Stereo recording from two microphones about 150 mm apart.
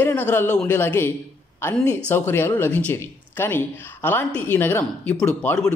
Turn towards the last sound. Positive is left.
turn(degrees=10)  # may be behind; listen again after turning